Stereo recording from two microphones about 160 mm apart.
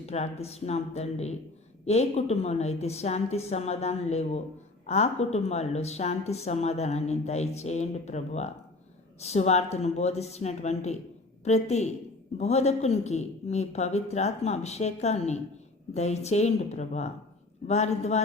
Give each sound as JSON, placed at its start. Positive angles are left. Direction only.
{"t": 0.0, "sound": "a woman's voice", "side_deg": 40}